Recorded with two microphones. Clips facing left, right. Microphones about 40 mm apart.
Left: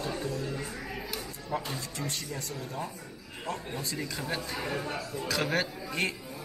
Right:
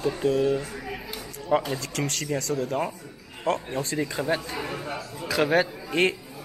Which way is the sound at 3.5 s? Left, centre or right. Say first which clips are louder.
Right 9 dB; right.